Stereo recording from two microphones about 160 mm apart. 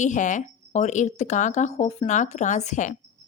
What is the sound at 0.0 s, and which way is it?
Speech, 50° left (ahead or behind).